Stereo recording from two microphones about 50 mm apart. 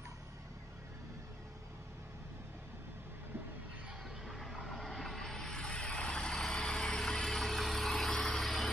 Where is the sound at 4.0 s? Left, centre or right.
Centre.